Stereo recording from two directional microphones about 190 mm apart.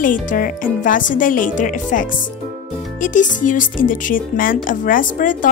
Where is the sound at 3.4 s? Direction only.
45° left (ahead or behind).